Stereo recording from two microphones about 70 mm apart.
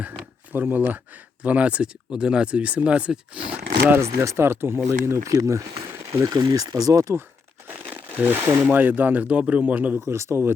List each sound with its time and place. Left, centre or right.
0.5 s speech: right
4.0 s speech: right
7.7 s crumpling: right
8.7 s speech: right
10.1 s speech: right